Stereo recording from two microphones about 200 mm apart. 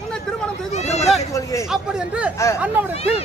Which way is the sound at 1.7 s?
5° right (ahead or behind).